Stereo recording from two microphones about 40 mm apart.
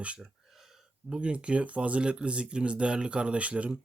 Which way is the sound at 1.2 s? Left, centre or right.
Right.